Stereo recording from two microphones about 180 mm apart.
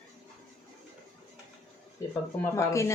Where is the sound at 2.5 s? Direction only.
15° left (ahead or behind).